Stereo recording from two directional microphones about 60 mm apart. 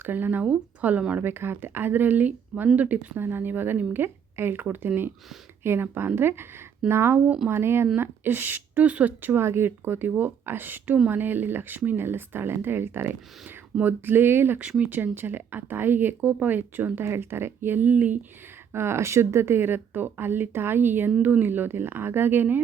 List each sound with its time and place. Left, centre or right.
0.0 s speech: right
1.2 s speech: right
3.2 s speech: right
9.3 s speech: right
14.6 s speech: right
18.7 s speech: right